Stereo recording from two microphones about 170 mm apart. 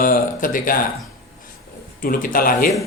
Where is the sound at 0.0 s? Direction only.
55° left (ahead or behind).